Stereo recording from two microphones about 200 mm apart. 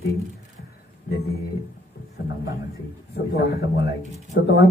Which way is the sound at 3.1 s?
55° left (ahead or behind).